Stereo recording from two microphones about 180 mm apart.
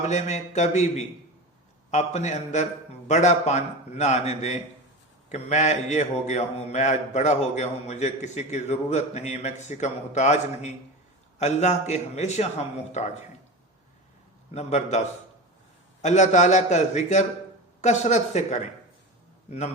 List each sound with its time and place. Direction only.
0.0 s a man's voice: 40° left (ahead or behind)
14.5 s a man's voice: 40° left (ahead or behind)